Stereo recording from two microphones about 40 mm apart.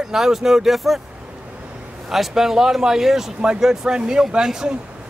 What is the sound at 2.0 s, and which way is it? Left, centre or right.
Speech, centre.